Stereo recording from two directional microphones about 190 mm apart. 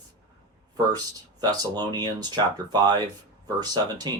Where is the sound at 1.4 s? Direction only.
20° right (ahead or behind).